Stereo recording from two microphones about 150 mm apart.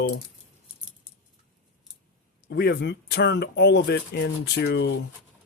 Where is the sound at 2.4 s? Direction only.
90° left.